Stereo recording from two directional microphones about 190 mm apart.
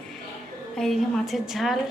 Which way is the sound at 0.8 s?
Centre (ahead or behind).